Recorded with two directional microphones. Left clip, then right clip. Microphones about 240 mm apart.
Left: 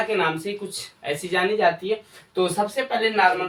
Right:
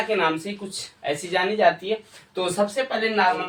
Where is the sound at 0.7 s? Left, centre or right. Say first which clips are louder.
Right 1 dB; centre.